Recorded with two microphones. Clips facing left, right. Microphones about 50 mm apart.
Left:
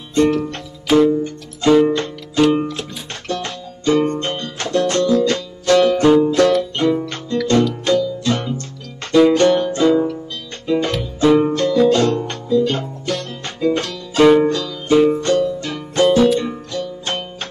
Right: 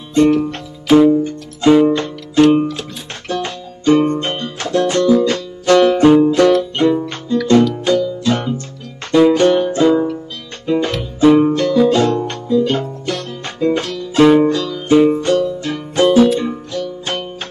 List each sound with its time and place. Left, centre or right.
0.1 s music: right
0.5 s music: centre